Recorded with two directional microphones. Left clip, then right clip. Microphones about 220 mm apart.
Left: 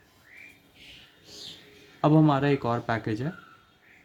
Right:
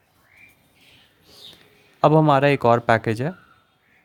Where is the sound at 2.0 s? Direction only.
25° right (ahead or behind).